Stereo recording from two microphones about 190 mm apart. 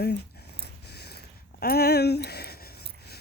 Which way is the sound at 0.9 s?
60° left (ahead or behind).